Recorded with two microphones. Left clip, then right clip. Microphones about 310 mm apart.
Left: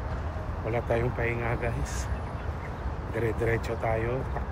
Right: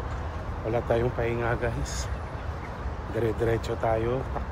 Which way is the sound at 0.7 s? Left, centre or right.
Centre.